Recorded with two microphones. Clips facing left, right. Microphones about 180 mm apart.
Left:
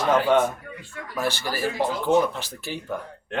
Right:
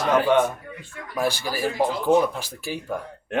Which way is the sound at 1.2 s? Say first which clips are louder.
Right 2 dB; 15° right (ahead or behind).